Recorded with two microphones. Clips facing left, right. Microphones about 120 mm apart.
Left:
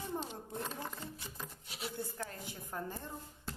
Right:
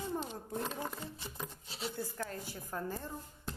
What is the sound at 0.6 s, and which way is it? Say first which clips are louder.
A woman's voice: right 3 dB; 20° right (ahead or behind).